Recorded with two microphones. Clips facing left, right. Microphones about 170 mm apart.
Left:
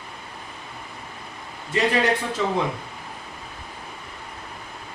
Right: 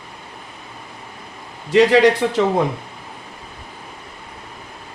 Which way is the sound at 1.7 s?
90° right.